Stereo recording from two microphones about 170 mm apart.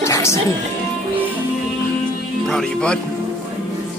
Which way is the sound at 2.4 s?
5° left (ahead or behind).